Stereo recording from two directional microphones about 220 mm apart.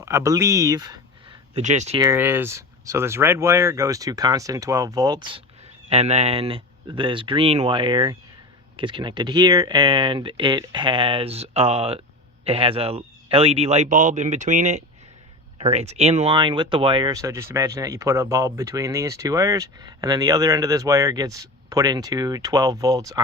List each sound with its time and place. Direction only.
0.0 s speech: 10° right (ahead or behind); by 2.0 s 30° right (ahead or behind)
2.0 s a man's voice: 10° right (ahead or behind)